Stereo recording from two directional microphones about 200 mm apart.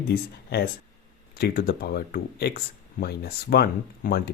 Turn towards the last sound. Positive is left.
turn(degrees=50)  # may be behind; listen again after turning